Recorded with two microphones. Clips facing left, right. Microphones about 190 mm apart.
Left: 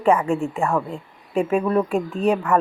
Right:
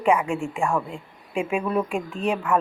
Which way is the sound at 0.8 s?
40° left (ahead or behind).